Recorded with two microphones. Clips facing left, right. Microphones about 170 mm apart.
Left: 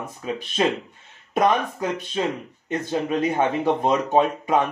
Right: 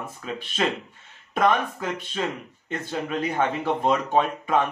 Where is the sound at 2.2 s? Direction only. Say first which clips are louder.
Left 4 dB; 20° left (ahead or behind).